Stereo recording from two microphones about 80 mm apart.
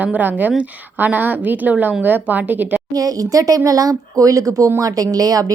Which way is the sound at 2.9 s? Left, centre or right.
Right.